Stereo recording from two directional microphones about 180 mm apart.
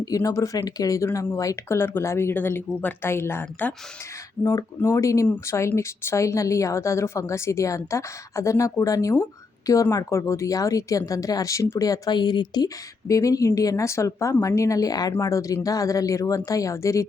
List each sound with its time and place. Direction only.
0.0 s speech: 20° left (ahead or behind)